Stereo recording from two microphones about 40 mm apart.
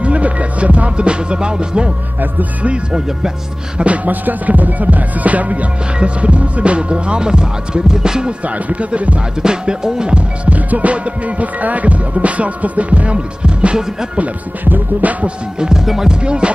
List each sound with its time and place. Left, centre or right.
0.0 s music: right
3.7 s music: right
5.9 s speech: right
8.6 s music: right
9.4 s music: centre
14.6 s music: right
15.7 s speech: centre
16.1 s speech: right